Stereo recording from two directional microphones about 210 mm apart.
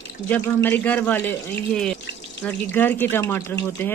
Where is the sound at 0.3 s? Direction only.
10° left (ahead or behind).